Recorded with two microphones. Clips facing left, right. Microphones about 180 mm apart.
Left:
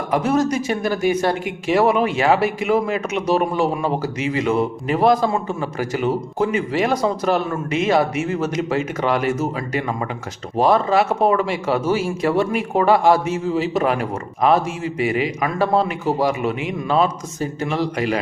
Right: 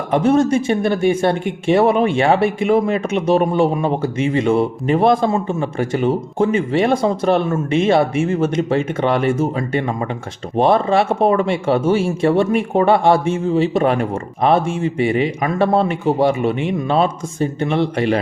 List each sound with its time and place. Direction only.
0.1 s speech: 25° right (ahead or behind)